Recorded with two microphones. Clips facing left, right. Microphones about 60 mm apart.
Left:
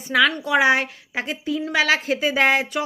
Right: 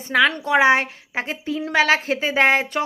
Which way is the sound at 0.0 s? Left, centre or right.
Right.